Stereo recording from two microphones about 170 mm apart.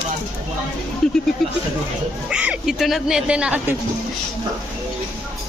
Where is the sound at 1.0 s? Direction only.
Centre (ahead or behind).